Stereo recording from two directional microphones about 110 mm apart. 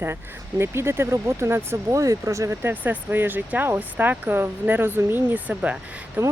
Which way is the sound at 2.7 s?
15° right (ahead or behind).